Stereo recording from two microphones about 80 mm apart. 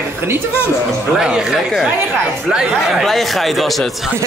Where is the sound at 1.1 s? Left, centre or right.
Centre.